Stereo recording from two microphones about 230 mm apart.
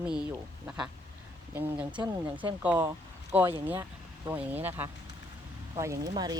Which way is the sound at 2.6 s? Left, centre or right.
Centre.